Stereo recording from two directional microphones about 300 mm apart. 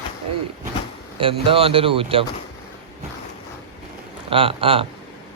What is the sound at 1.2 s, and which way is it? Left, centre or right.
Speech, centre.